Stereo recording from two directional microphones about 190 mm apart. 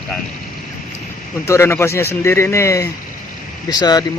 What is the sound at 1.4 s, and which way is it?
A man's voice, 15° left (ahead or behind).